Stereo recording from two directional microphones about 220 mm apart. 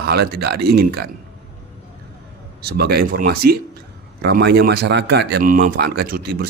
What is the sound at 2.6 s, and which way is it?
Speech, 45° right (ahead or behind).